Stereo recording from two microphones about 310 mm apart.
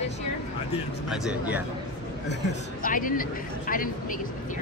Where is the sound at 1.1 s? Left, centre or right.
Centre.